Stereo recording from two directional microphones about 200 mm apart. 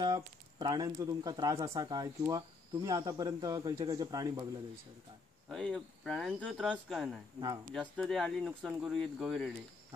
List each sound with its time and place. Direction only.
0.0 s speech: 20° right (ahead or behind)
5.5 s speech: centre (ahead or behind)